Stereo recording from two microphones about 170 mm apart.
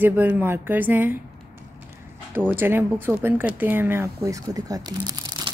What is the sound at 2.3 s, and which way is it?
Speech, 10° right (ahead or behind).